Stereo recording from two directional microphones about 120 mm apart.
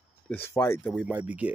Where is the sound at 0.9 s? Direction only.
10° right (ahead or behind).